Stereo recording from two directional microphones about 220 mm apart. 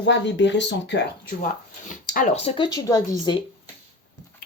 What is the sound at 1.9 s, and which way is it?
Speech, 35° left (ahead or behind).